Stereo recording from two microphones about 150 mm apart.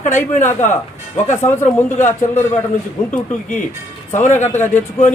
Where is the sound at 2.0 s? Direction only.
50° left (ahead or behind).